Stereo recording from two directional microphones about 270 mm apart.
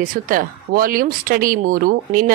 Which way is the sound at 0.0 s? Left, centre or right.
Right.